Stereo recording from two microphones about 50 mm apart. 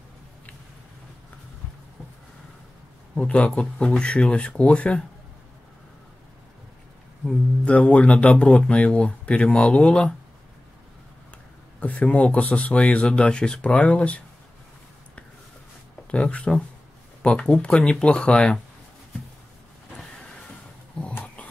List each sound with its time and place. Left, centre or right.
3.2 s speech: left
7.6 s speech: left
11.8 s speech: left
16.1 s speech: left